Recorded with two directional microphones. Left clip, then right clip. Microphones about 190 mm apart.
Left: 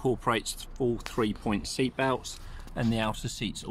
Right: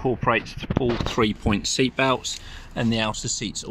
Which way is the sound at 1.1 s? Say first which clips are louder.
Right 7 dB; 25° right (ahead or behind).